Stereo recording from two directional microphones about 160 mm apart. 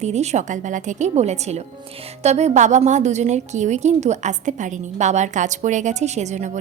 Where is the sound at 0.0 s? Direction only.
45° right (ahead or behind).